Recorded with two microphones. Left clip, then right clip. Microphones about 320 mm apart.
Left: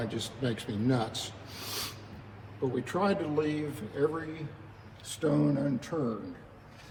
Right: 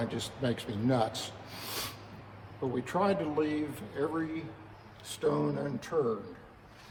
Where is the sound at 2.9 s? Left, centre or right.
Right.